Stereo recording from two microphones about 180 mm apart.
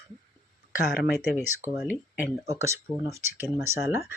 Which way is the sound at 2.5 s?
15° right (ahead or behind).